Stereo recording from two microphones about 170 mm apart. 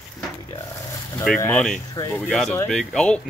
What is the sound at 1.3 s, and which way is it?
Speech, centre (ahead or behind).